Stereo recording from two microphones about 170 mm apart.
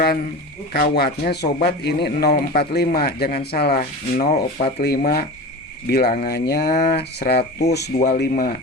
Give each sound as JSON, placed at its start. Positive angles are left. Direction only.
{"t": 0.7, "sound": "speech", "side_deg": 70}
{"t": 2.3, "sound": "speech", "side_deg": 60}
{"t": 4.8, "sound": "speech", "side_deg": 65}
{"t": 7.9, "sound": "speech", "side_deg": 45}
{"t": 8.2, "sound": "speech", "side_deg": 65}